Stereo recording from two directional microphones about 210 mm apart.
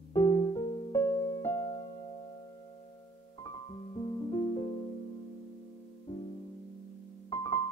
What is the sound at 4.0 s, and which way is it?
Music, 20° left (ahead or behind).